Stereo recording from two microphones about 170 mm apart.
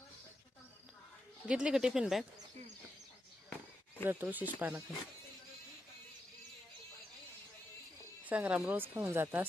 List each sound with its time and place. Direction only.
1.5 s speech: 5° right (ahead or behind)
4.0 s speech: 10° right (ahead or behind)
8.2 s speech: 10° right (ahead or behind)